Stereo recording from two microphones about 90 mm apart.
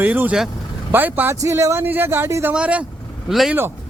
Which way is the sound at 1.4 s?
35° right (ahead or behind).